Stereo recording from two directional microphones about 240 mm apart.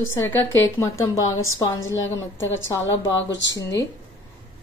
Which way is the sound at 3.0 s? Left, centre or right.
Left.